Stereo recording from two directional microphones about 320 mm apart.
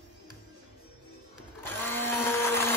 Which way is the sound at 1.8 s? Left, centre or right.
Centre.